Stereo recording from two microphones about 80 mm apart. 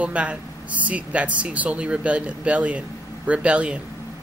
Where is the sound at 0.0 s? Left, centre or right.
Centre.